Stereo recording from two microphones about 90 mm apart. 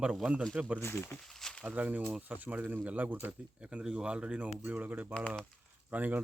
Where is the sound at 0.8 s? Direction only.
30° left (ahead or behind).